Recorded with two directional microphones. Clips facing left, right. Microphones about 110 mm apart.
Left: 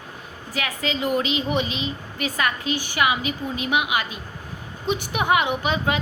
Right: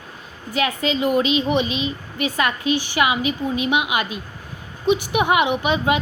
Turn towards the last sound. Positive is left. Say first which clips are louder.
# right 4 dB
turn(degrees=-20)  # may be behind; listen again after turning